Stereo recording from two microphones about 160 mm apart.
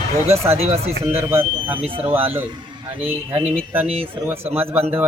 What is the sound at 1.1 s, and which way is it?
Speech, 15° right (ahead or behind).